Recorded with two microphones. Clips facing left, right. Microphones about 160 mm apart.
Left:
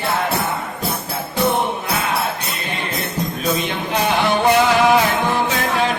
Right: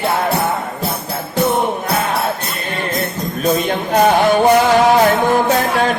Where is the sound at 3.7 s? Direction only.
45° right (ahead or behind).